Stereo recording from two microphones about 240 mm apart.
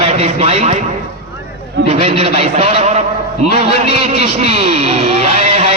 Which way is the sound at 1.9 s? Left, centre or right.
Right.